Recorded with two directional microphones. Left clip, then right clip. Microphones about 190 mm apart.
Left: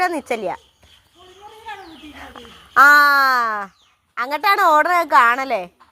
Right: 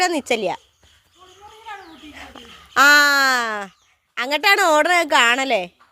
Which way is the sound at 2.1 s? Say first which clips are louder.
Even; 40° right (ahead or behind).